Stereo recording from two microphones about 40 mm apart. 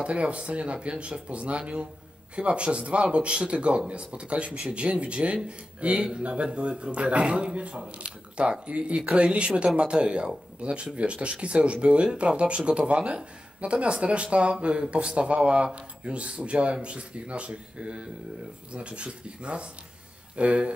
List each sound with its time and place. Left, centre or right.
0.0 s speech: right
10.0 s speech: right